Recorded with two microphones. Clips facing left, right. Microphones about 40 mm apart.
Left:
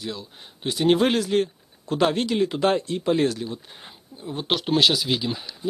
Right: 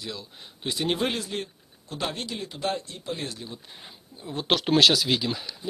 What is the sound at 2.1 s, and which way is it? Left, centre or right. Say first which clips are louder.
Speech: left 12 dB; left.